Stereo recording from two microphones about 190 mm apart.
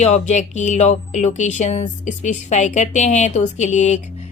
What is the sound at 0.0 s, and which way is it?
Speech, 35° left (ahead or behind).